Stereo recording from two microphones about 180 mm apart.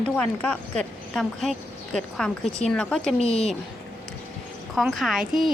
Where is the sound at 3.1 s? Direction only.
35° left (ahead or behind).